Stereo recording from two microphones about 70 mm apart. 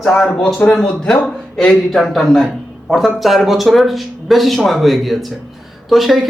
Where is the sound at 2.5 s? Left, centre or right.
Centre.